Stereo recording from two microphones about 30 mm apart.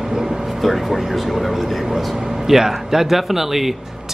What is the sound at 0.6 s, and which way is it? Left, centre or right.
Speech, centre.